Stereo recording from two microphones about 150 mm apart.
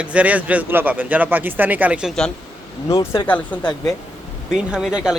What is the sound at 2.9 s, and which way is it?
Speech, 20° left (ahead or behind).